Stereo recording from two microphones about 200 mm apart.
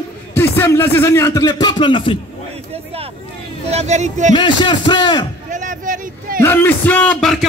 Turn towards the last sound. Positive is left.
turn(degrees=0)  # may be behind; listen again after turning